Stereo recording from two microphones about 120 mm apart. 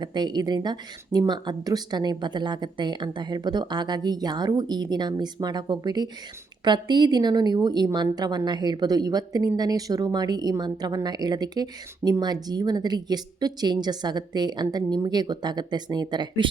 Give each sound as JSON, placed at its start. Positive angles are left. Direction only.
{"t": 0.0, "sound": "speech", "side_deg": -35}